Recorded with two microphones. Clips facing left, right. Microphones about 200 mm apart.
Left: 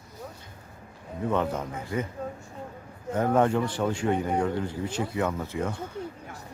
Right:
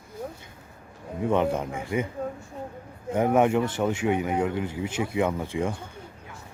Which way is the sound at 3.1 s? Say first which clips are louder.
Right 2 dB; 15° right (ahead or behind).